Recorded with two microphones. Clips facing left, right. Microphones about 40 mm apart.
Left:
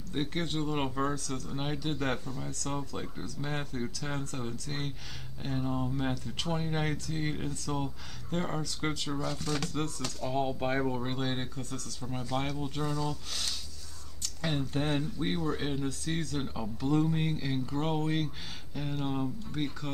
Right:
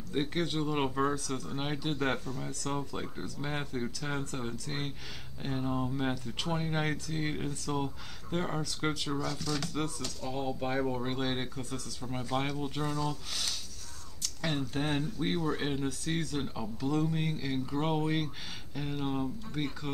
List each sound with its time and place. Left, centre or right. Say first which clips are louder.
0.1 s speech: right 1 dB; centre
9.4 s speech: left 1 dB; left
10.0 s speech: left 3 dB; centre
10.8 s speech: even; centre
16.4 s speech: left 2 dB; centre
17.6 s speech: right 1 dB; centre